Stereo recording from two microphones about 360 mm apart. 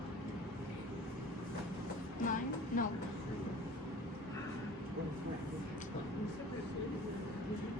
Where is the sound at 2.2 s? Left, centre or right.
Left.